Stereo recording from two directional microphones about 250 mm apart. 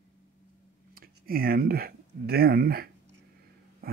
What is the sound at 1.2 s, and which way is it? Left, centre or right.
Speech, right.